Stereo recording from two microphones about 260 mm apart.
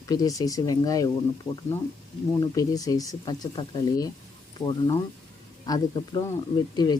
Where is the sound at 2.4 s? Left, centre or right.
Centre.